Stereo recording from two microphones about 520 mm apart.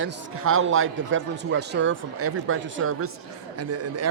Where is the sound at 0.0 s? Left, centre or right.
Right.